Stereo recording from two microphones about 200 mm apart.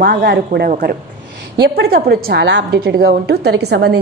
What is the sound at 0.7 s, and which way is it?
Speech, 40° right (ahead or behind).